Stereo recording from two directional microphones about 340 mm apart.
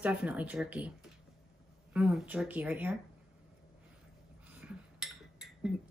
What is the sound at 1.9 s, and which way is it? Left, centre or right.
A woman's voice, centre.